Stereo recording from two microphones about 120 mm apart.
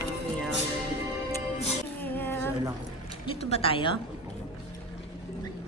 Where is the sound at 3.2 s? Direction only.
50° left (ahead or behind).